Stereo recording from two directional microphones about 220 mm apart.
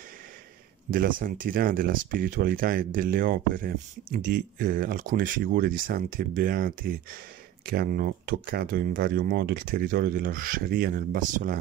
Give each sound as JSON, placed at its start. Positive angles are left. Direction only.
{"t": 0.8, "sound": "speech", "side_deg": -40}